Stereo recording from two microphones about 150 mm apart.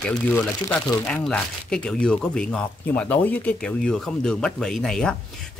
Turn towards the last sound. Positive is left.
turn(degrees=5)  # may be behind; listen again after turning